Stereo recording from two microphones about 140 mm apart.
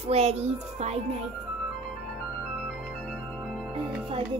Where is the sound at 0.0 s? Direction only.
45° right (ahead or behind).